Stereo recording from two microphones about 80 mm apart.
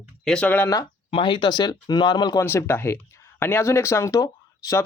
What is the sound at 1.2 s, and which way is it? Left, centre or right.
Speech, left.